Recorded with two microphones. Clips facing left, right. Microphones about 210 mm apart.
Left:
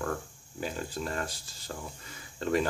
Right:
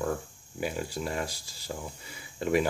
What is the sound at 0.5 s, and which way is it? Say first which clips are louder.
Speech: right 2 dB; 10° right (ahead or behind).